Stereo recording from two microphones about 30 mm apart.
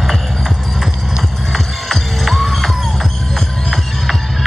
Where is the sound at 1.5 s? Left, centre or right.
Centre.